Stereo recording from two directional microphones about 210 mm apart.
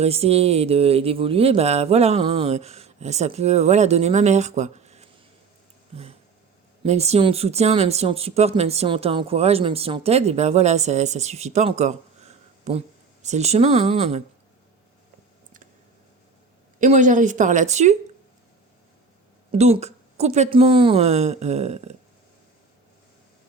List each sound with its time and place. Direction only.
0.0 s speech: 30° right (ahead or behind)
6.8 s speech: 30° right (ahead or behind)
16.8 s speech: 35° right (ahead or behind)
19.5 s speech: 30° right (ahead or behind)